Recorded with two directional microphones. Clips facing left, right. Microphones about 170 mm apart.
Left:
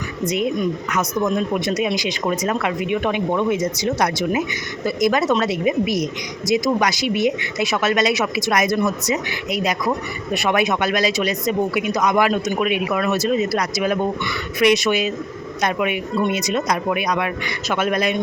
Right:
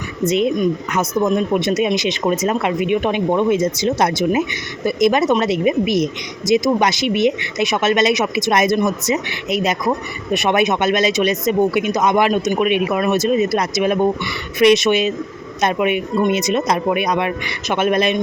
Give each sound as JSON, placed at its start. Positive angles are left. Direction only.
{"t": 0.3, "sound": "speech", "side_deg": -25}